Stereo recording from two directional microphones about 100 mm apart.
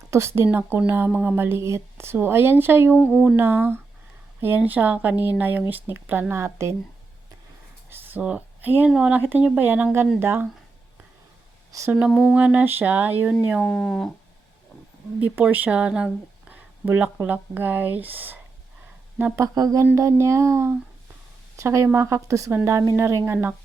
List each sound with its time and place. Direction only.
0.1 s speech: 30° right (ahead or behind)
7.9 s a sound: 20° right (ahead or behind)
8.9 s speech: 10° right (ahead or behind)
11.9 s speech: 5° right (ahead or behind)
13.6 s speech: 5° left (ahead or behind)
15.2 s speech: 15° right (ahead or behind)
19.5 s a sound: 40° right (ahead or behind)
19.8 s speech: 25° right (ahead or behind)